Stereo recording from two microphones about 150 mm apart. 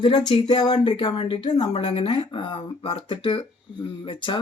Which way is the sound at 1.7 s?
40° left (ahead or behind).